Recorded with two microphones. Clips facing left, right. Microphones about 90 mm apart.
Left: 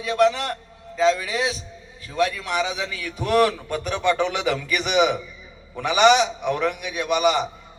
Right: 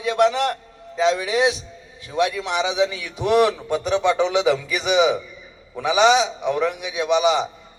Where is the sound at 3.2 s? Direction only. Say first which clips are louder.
Right 2 dB; 15° right (ahead or behind).